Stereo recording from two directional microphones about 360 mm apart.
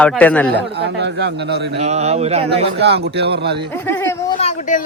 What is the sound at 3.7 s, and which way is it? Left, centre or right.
Speech, centre.